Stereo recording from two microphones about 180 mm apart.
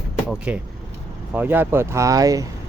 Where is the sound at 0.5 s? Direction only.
5° right (ahead or behind).